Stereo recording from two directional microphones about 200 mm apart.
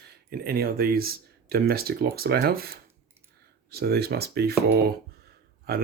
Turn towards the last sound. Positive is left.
turn(degrees=-50)  # may be behind; listen again after turning